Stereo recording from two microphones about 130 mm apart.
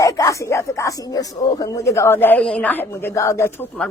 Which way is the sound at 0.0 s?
25° left (ahead or behind).